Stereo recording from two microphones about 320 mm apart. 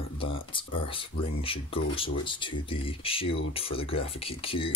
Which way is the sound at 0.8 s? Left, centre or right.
Centre.